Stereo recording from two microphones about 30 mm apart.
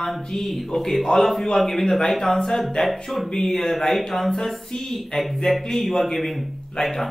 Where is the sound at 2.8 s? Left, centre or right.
Centre.